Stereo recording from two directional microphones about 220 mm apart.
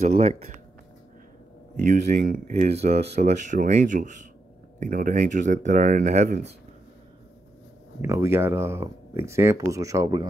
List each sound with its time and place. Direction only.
0.0 s speech: 30° right (ahead or behind)
1.9 s speech: 35° right (ahead or behind)
8.0 s speech: 15° right (ahead or behind)